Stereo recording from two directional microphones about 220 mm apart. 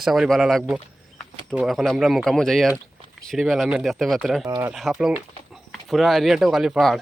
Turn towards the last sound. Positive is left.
turn(degrees=0)  # may be behind; listen again after turning